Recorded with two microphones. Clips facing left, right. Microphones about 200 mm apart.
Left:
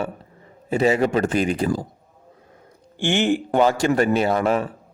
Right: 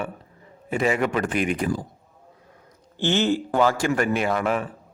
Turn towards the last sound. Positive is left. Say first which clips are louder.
# left 4 dB
turn(degrees=35)  # may be behind; listen again after turning